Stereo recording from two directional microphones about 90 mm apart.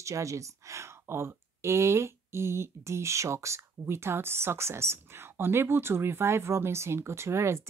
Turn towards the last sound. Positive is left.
turn(degrees=-30)  # may be behind; listen again after turning